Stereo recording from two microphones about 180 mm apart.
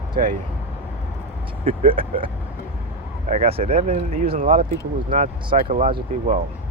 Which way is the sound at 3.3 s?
35° right (ahead or behind).